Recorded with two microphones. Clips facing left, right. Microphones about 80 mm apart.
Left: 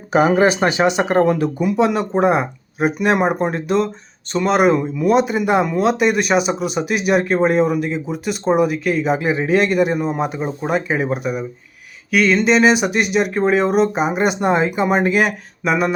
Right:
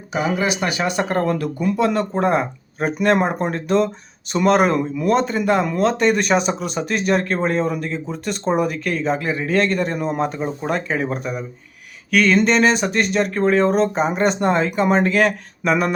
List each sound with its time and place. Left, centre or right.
0.1 s speech: left; by 16.0 s centre